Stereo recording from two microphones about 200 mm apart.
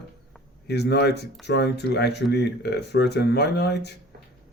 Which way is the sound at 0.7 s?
55° left (ahead or behind).